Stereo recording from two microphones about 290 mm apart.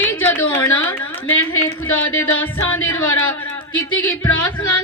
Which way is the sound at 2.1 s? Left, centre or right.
Centre.